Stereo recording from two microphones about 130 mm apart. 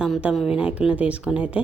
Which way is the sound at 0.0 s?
5° right (ahead or behind).